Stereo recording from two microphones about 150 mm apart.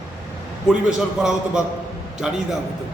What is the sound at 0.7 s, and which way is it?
A man's voice, 5° right (ahead or behind).